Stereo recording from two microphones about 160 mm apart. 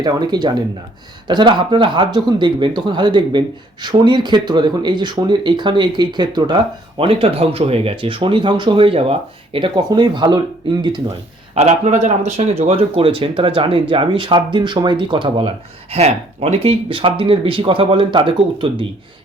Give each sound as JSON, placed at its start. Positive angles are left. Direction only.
{"t": 0.0, "sound": "speech", "side_deg": -25}
{"t": 11.5, "sound": "speech", "side_deg": -45}